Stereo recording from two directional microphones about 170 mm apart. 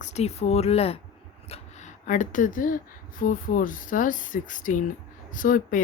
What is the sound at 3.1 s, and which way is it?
Speech, 50° left (ahead or behind).